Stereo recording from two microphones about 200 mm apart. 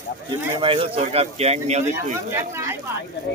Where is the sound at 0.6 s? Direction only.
25° right (ahead or behind).